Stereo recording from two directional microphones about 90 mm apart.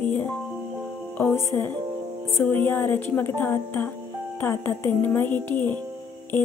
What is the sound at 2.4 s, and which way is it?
Speech, 20° left (ahead or behind).